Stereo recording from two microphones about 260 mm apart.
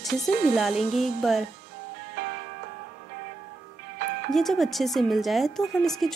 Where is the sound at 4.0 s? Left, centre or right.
Right.